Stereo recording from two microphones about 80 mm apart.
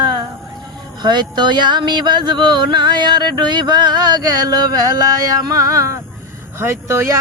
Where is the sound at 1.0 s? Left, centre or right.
Right.